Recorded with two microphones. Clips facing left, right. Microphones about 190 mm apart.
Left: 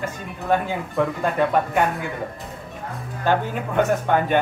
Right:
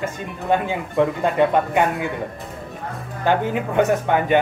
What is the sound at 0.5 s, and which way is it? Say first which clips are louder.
Speech: right 2 dB; 20° right (ahead or behind).